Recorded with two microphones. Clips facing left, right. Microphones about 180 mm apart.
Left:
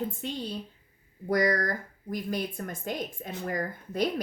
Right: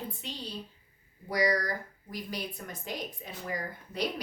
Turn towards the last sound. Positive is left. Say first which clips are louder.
# left 5 dB
turn(degrees=50)  # may be behind; listen again after turning